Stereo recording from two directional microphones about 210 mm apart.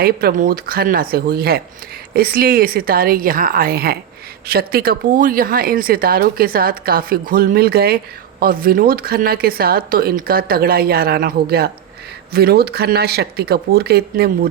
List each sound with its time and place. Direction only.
0.0 s speech: 45° right (ahead or behind)